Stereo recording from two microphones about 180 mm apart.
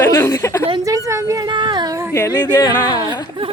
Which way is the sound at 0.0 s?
15° left (ahead or behind).